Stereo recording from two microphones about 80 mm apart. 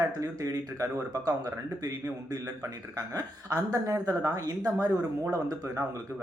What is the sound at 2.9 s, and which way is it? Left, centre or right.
Speech, right.